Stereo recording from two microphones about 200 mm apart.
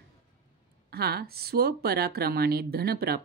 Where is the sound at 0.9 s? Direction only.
50° right (ahead or behind).